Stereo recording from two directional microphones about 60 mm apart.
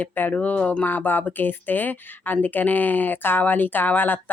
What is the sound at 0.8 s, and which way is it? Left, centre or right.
Speech, left.